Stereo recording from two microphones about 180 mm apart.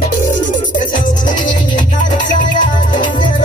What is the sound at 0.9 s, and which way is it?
Music, 45° left (ahead or behind).